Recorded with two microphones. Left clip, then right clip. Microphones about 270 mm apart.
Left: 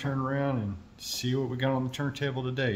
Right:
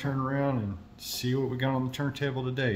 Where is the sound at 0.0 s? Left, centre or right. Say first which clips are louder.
Right 1 dB; centre.